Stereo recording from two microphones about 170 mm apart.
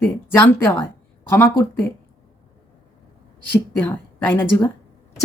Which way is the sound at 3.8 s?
10° left (ahead or behind).